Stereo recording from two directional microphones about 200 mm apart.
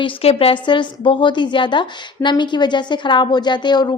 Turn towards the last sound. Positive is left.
turn(degrees=20)  # may be behind; listen again after turning